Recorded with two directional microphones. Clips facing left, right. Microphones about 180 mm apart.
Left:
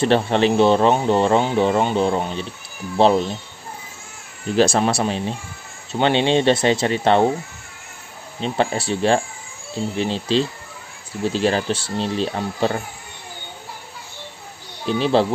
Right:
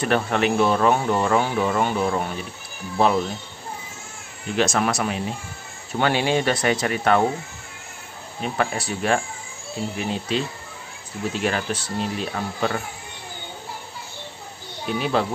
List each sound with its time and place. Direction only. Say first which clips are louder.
0.0 s speech: left 4 dB; 30° left (ahead or behind)
4.6 s speech: left 4 dB; 30° left (ahead or behind)
8.4 s speech: left 4 dB; 25° left (ahead or behind)
14.9 s speech: left 5 dB; 30° left (ahead or behind)